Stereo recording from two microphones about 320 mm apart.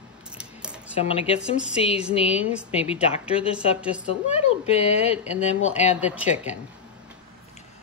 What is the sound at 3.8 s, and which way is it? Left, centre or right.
Speech, centre.